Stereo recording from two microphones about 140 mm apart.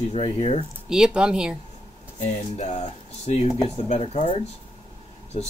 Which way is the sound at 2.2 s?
55° left (ahead or behind).